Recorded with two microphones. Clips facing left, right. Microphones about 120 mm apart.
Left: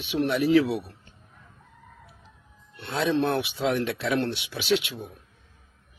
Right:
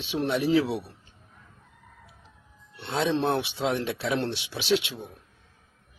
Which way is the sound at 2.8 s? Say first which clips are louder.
Left 1 dB; 30° right (ahead or behind).